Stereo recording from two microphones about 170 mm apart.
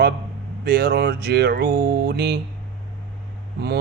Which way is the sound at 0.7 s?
65° right (ahead or behind).